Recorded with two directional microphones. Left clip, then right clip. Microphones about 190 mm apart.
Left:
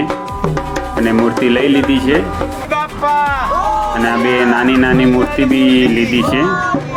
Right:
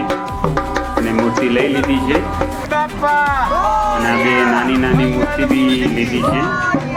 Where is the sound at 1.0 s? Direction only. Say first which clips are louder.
Left 6 dB; 35° left (ahead or behind).